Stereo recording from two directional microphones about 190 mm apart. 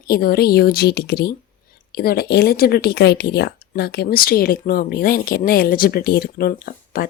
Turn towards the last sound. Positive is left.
turn(degrees=50)  # may be behind; listen again after turning